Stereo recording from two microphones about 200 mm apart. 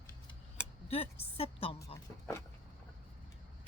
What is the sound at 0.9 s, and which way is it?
A woman's voice, 30° left (ahead or behind).